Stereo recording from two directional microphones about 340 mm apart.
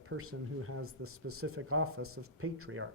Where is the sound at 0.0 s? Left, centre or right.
Right.